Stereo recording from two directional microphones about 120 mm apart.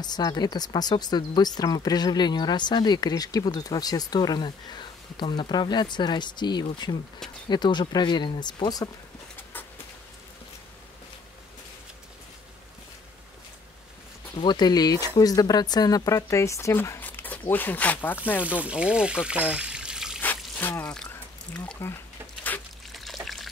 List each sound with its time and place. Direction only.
0.0 s speech: 35° left (ahead or behind)
14.4 s speech: 35° left (ahead or behind); by 18.4 s 15° left (ahead or behind)
18.4 s speech: 10° right (ahead or behind)
20.2 s trickle: 15° left (ahead or behind)
21.5 s speech: 15° left (ahead or behind)
22.9 s trickle: centre (ahead or behind)